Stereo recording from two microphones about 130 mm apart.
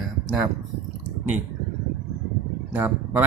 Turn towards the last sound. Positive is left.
turn(degrees=-15)  # may be behind; listen again after turning